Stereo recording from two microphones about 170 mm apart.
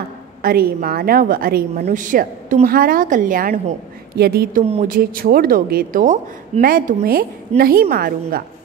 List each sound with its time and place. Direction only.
0.4 s a woman's voice: 60° right (ahead or behind)
4.2 s a woman's voice: 65° right (ahead or behind)